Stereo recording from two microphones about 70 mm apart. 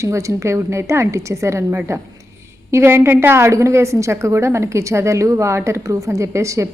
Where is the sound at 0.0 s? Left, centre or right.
Right.